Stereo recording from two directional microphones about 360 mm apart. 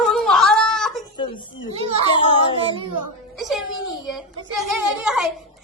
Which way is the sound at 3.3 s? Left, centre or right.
Centre.